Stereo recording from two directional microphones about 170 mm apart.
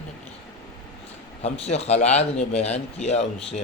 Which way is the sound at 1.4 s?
40° left (ahead or behind).